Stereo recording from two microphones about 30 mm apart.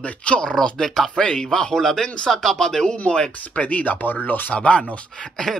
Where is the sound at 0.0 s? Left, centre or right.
Left.